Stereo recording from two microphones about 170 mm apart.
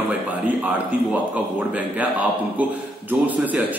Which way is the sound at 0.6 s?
10° right (ahead or behind).